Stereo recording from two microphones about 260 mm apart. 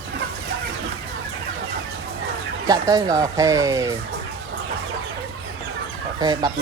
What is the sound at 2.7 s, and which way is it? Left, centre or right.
Speech, centre.